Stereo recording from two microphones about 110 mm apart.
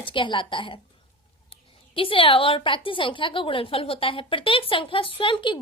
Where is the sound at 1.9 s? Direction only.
55° left (ahead or behind).